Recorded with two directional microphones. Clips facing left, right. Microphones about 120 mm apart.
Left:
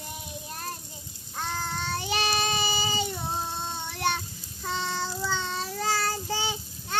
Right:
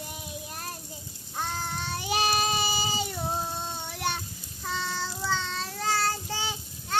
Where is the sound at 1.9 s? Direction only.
10° right (ahead or behind).